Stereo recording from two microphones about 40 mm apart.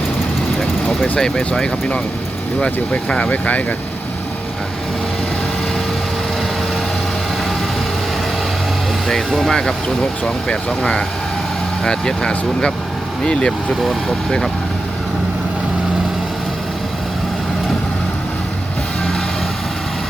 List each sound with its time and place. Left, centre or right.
1.2 s speech: centre
2.9 s speech: left
9.5 s speech: centre